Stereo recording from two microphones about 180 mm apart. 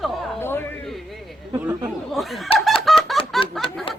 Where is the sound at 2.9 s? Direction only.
Centre (ahead or behind).